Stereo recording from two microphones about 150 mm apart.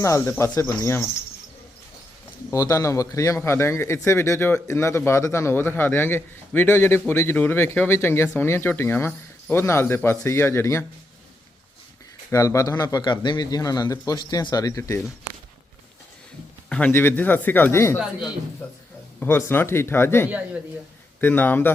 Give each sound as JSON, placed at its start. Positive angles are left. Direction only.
{"t": 0.0, "sound": "a man's voice", "side_deg": 20}
{"t": 2.5, "sound": "a man's voice", "side_deg": 20}
{"t": 12.3, "sound": "speech", "side_deg": 20}
{"t": 16.6, "sound": "a man's voice", "side_deg": 10}